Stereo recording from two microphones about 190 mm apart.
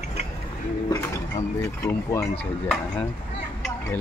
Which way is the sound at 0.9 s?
15° left (ahead or behind).